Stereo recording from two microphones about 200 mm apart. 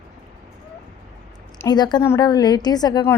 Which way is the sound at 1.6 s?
20° left (ahead or behind).